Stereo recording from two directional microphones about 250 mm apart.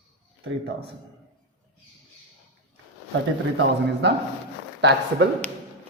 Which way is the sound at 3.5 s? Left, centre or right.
Right.